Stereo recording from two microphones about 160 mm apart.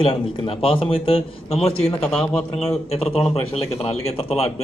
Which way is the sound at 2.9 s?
40° left (ahead or behind).